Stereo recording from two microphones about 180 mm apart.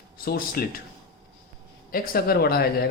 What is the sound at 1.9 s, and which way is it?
Speech, 55° left (ahead or behind).